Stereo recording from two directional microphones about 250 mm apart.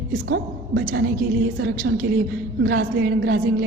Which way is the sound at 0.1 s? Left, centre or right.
Right.